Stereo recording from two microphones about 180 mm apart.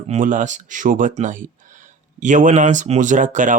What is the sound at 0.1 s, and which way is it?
Speech, 45° right (ahead or behind).